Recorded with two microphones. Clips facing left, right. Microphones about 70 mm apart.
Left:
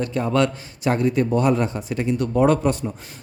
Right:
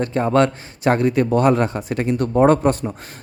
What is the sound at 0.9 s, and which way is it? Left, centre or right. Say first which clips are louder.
Speech: right 3 dB; right.